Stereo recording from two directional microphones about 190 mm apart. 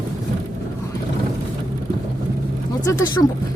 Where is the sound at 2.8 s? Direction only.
15° left (ahead or behind).